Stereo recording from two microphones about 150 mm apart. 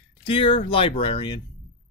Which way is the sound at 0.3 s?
35° left (ahead or behind).